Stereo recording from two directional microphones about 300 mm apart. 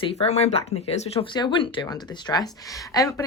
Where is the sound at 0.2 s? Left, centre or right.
Left.